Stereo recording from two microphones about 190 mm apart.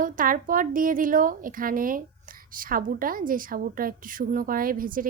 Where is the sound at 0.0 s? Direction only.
45° right (ahead or behind).